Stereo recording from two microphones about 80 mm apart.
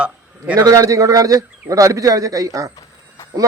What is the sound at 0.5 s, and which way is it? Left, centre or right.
A man's voice, right.